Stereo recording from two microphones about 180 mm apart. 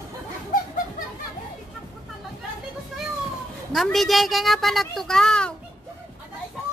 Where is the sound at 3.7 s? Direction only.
Centre (ahead or behind).